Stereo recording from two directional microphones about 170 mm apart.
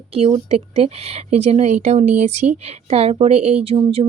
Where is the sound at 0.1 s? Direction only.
35° right (ahead or behind).